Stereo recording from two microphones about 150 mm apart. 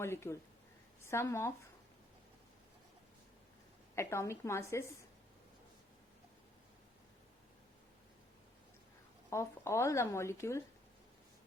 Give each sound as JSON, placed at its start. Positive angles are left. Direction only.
{"t": 0.0, "sound": "speech", "side_deg": 15}
{"t": 3.9, "sound": "speech", "side_deg": 20}
{"t": 9.3, "sound": "speech", "side_deg": 20}